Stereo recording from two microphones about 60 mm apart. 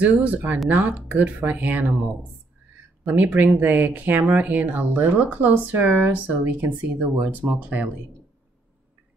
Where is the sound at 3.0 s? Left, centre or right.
Right.